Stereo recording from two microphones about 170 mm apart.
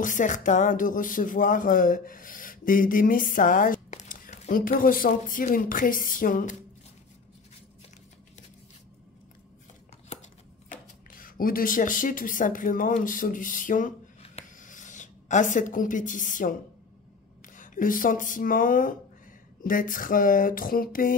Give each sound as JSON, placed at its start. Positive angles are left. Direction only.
{"t": 0.0, "sound": "speech", "side_deg": 50}
{"t": 10.7, "sound": "speech", "side_deg": 55}
{"t": 14.3, "sound": "a sound", "side_deg": 50}
{"t": 17.6, "sound": "speech", "side_deg": 55}